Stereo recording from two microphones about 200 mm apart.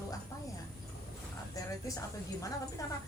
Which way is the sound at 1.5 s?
15° left (ahead or behind).